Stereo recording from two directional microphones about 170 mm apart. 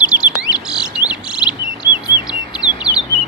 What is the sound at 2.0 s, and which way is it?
Chirp, 25° left (ahead or behind).